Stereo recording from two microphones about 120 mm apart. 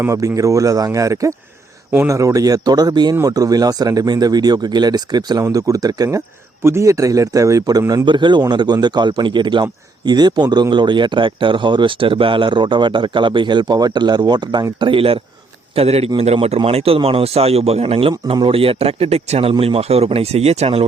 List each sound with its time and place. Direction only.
0.0 s speech: 25° right (ahead or behind); by 20.8 s 55° right (ahead or behind)